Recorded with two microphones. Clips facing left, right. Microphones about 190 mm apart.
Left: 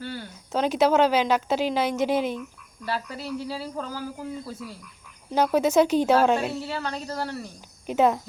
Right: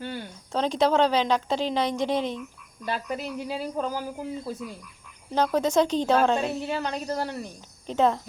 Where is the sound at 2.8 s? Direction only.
20° right (ahead or behind).